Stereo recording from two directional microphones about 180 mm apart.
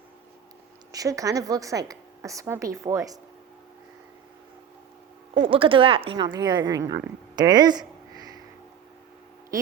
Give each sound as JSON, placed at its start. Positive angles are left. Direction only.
{"t": 0.9, "sound": "a woman's voice", "side_deg": -20}
{"t": 5.3, "sound": "speech", "side_deg": -30}
{"t": 7.3, "sound": "a sound", "side_deg": -25}